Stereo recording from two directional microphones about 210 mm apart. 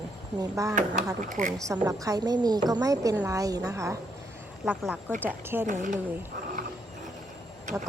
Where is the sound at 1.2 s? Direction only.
35° right (ahead or behind).